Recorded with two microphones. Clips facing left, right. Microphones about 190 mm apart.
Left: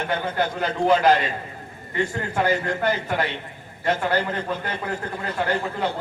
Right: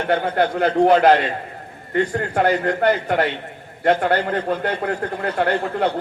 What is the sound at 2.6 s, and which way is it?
A man's voice, 65° right (ahead or behind).